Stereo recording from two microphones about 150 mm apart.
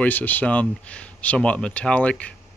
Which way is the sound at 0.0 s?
10° left (ahead or behind).